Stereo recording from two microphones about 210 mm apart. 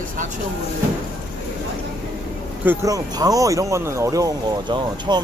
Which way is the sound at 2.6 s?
15° right (ahead or behind).